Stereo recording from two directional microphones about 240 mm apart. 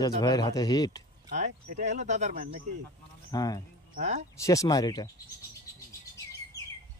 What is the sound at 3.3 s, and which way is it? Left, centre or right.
Speech, centre.